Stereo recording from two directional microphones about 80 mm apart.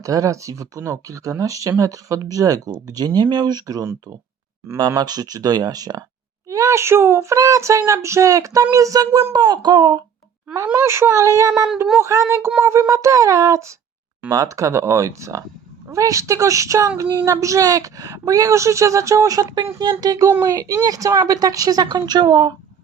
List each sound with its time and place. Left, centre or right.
0.0 s a woman's voice: right
4.9 s speech: right
6.5 s child singing: right
8.7 s a woman's voice: right
9.3 s speech: right
10.8 s child singing: right
12.9 s a woman's voice: right
14.3 s child singing: right
17.0 s a woman's voice: right
19.8 s a woman's voice: right